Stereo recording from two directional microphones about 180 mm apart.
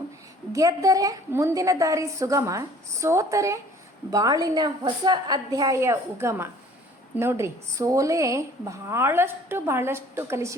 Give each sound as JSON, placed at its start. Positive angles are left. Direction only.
{"t": 0.5, "sound": "a woman's voice", "side_deg": -20}